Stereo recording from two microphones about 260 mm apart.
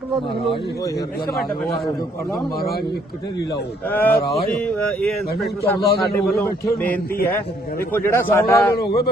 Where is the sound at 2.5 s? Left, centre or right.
Left.